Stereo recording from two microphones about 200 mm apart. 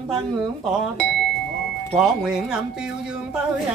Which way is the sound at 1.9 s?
Centre (ahead or behind).